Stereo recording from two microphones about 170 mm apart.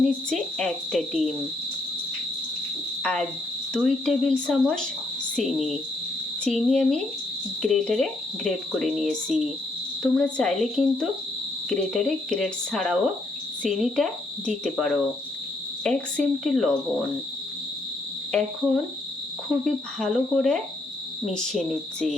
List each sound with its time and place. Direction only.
0.0 s speech: centre (ahead or behind)
3.0 s speech: 5° left (ahead or behind)
6.4 s speech: 5° left (ahead or behind)
18.3 s speech: 5° left (ahead or behind)